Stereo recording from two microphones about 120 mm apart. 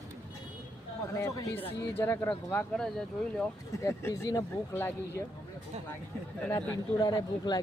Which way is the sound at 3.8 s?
25° left (ahead or behind).